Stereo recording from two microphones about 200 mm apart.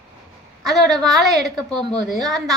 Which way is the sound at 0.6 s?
Centre (ahead or behind).